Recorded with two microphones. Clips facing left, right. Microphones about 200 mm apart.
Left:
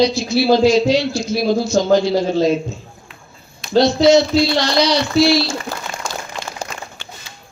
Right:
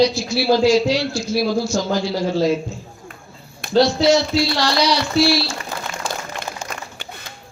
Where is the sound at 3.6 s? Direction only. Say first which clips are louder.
Left 2 dB; 55° right (ahead or behind).